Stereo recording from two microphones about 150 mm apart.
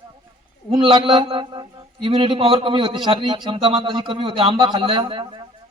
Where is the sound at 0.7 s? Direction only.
35° right (ahead or behind).